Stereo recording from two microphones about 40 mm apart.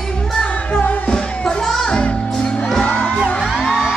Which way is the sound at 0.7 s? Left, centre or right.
Left.